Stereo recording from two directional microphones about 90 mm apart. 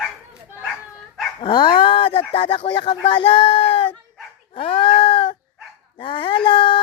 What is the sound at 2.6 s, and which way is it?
Speech, 55° left (ahead or behind).